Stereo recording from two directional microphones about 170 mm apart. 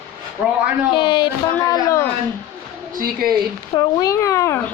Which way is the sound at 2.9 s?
60° right (ahead or behind).